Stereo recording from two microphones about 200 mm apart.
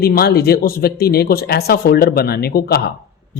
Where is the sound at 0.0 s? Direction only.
50° left (ahead or behind).